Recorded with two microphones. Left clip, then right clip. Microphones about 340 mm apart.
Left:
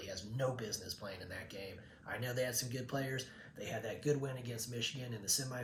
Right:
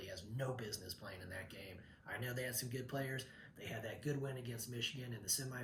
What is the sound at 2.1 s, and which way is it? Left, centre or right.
Speech, centre.